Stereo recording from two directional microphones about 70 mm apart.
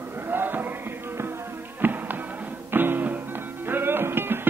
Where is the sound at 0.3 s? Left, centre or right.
Right.